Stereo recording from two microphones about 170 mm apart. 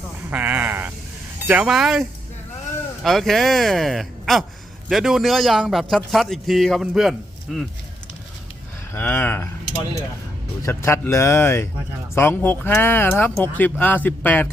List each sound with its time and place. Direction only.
0.3 s a man's voice: 10° right (ahead or behind)
9.0 s speech: 10° left (ahead or behind)
10.6 s speech: 15° left (ahead or behind)